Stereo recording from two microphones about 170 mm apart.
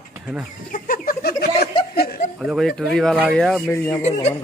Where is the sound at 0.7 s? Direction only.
50° left (ahead or behind).